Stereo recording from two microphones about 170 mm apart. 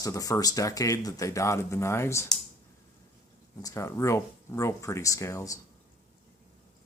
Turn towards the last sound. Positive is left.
turn(degrees=20)  # may be behind; listen again after turning